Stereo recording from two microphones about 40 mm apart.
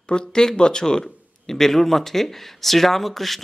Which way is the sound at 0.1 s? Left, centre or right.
Centre.